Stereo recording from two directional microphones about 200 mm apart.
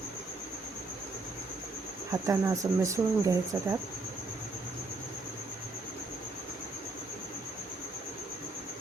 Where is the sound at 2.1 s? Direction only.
15° right (ahead or behind).